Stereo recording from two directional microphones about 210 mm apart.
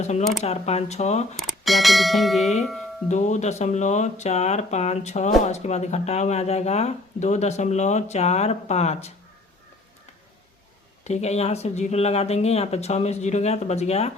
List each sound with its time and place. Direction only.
0.0 s speech: 35° left (ahead or behind)
1.4 s speech: centre (ahead or behind)
3.1 s speech: 35° left (ahead or behind)
11.0 s speech: 30° left (ahead or behind)